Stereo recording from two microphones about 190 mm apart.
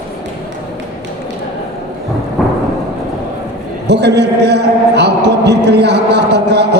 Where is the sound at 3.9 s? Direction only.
60° right (ahead or behind).